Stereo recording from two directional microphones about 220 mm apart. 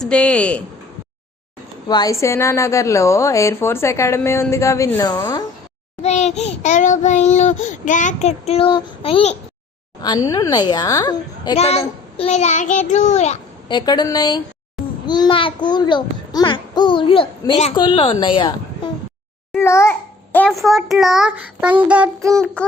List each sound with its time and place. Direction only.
0.0 s a child's voice: 5° left (ahead or behind)
1.9 s a woman's voice: 15° left (ahead or behind)
6.0 s child singing: 30° left (ahead or behind)
10.0 s a woman's voice: 15° left (ahead or behind)